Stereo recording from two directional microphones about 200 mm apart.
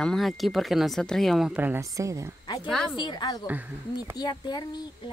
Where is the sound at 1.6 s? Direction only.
10° right (ahead or behind).